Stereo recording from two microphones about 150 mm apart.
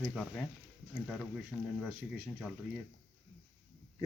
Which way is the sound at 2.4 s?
5° right (ahead or behind).